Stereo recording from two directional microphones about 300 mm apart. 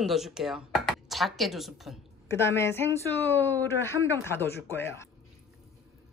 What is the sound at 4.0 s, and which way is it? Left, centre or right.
Speech, centre.